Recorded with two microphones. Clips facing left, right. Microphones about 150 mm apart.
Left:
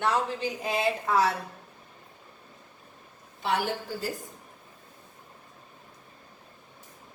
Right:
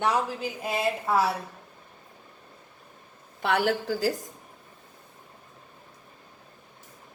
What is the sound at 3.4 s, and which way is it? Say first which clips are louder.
Speech: right 4 dB; 70° right (ahead or behind).